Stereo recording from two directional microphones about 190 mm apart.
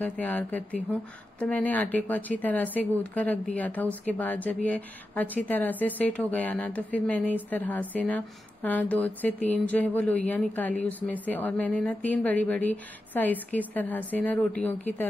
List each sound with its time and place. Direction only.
0.0 s speech: 10° left (ahead or behind)